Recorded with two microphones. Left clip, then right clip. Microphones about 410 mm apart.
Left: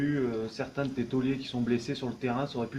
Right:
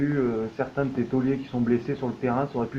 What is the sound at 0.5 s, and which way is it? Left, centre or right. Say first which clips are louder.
Speech: right 6 dB; right.